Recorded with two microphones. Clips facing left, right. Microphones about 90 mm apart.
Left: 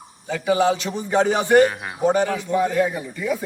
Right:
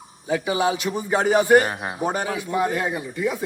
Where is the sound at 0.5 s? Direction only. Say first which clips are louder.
Left 2 dB; 15° right (ahead or behind).